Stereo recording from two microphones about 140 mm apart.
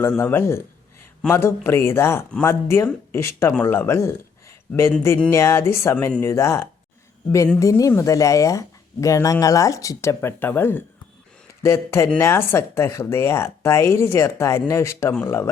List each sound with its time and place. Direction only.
0.2 s speech: 15° left (ahead or behind)